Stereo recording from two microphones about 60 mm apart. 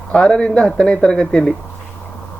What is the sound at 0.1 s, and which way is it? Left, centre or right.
Speech, centre.